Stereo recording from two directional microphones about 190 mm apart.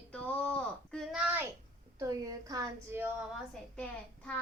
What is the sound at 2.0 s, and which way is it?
A child's voice, 15° right (ahead or behind).